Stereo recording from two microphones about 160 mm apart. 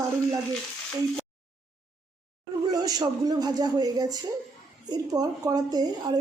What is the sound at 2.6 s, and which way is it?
A woman's voice, 25° right (ahead or behind).